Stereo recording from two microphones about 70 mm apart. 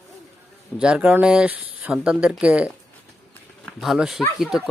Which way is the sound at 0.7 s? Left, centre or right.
Centre.